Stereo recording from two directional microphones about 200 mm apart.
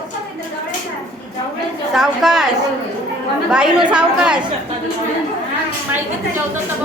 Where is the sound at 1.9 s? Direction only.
Centre (ahead or behind).